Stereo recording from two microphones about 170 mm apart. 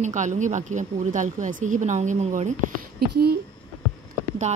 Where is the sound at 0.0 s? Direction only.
45° right (ahead or behind).